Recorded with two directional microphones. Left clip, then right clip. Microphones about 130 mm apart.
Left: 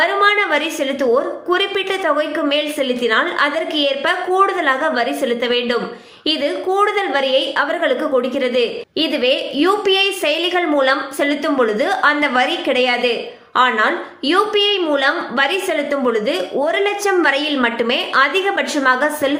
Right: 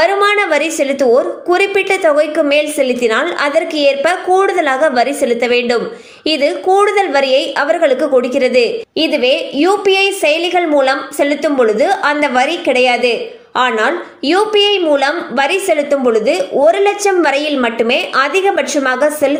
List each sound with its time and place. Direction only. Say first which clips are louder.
0.0 s a woman's voice: right 3 dB; 45° right (ahead or behind)
9.0 s a woman's voice: right 4 dB; 30° right (ahead or behind)